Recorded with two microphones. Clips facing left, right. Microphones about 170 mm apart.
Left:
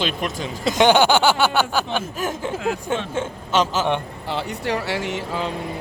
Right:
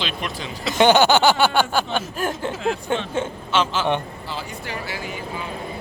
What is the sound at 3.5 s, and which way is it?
Speech, 40° left (ahead or behind).